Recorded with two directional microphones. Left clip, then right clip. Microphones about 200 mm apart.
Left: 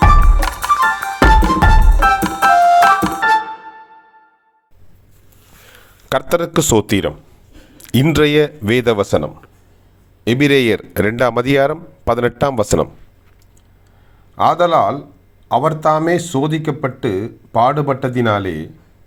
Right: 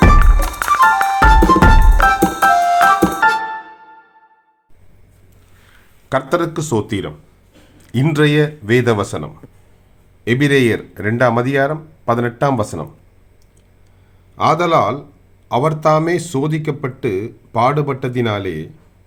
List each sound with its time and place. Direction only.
0.1 s music: centre (ahead or behind)
6.1 s speech: 40° left (ahead or behind)
14.3 s a man's voice: 10° left (ahead or behind)